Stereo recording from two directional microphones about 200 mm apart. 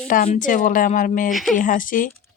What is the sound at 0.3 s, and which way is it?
Speech, 40° left (ahead or behind).